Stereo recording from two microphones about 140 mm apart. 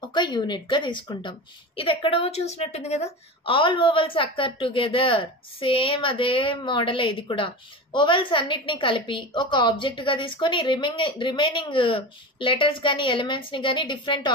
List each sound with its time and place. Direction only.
0.1 s a woman's voice: 35° left (ahead or behind)